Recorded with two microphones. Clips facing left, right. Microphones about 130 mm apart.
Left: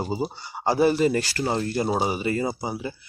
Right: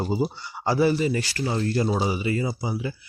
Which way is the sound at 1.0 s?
45° left (ahead or behind).